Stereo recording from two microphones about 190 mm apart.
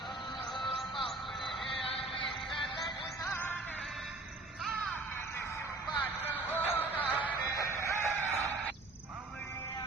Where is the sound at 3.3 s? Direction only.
10° left (ahead or behind).